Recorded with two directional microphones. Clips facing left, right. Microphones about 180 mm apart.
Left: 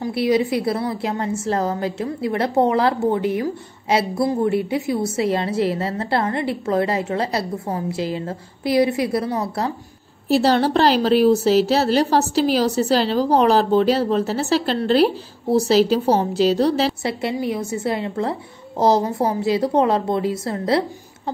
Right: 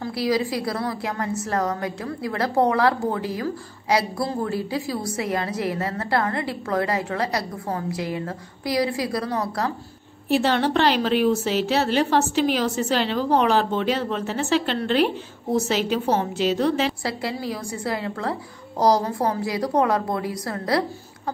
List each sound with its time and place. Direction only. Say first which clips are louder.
0.0 s a woman's voice: left 4 dB; 25° left (ahead or behind)
10.2 s a woman's voice: left 4 dB; 35° left (ahead or behind)
17.0 s a woman's voice: left 5 dB; 25° left (ahead or behind)